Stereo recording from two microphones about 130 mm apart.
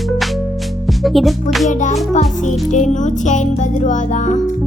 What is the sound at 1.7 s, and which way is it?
Music, 70° left (ahead or behind).